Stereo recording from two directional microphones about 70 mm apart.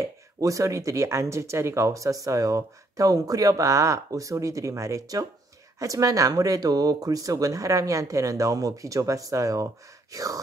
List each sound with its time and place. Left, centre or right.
0.0 s speech: right